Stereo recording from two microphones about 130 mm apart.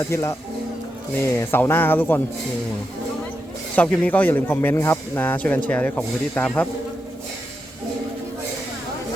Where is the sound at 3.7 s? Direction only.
10° left (ahead or behind).